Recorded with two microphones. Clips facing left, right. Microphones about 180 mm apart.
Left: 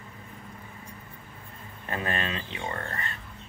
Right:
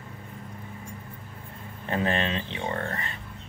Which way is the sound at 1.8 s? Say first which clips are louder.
Right 5 dB; 25° right (ahead or behind).